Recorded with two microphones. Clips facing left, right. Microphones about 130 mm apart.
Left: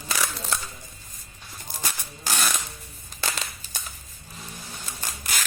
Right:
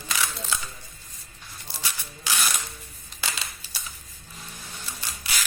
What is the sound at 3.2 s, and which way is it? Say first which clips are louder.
Crushing: left 2 dB; 40° left (ahead or behind).